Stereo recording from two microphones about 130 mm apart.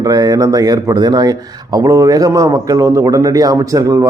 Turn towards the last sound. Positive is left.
turn(degrees=-25)  # may be behind; listen again after turning